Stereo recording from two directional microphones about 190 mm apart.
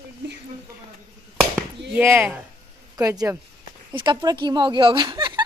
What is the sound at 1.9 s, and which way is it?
Speech, 10° right (ahead or behind).